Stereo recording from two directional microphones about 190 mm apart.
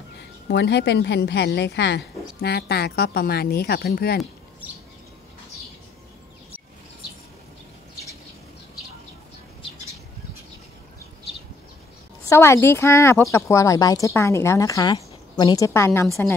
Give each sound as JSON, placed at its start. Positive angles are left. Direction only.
{"t": 0.2, "sound": "a woman's voice", "side_deg": 65}
{"t": 12.3, "sound": "speech", "side_deg": 15}